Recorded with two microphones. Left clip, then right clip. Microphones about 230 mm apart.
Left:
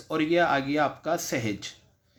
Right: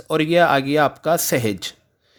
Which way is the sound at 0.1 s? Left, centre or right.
Right.